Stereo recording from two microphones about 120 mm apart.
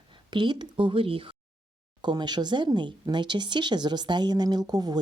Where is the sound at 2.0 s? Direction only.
35° right (ahead or behind).